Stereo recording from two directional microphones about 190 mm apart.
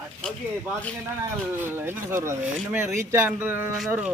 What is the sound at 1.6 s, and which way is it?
Speech, 10° right (ahead or behind).